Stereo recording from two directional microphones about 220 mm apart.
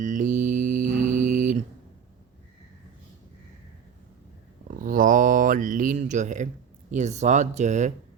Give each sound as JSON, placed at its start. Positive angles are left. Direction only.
{"t": 0.0, "sound": "music", "side_deg": -35}
{"t": 4.8, "sound": "a sound", "side_deg": -40}
{"t": 6.9, "sound": "speech", "side_deg": -30}